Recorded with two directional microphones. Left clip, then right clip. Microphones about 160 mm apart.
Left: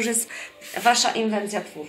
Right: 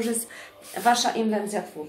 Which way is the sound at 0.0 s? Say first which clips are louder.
Left 3 dB; 25° left (ahead or behind).